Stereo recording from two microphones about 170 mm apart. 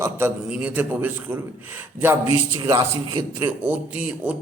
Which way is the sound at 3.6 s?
10° right (ahead or behind).